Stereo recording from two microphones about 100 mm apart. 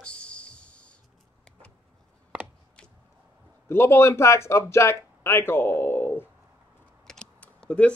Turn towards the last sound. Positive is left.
turn(degrees=15)  # may be behind; listen again after turning